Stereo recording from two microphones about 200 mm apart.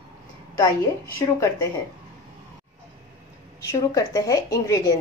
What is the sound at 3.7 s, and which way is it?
A woman's voice, 15° left (ahead or behind).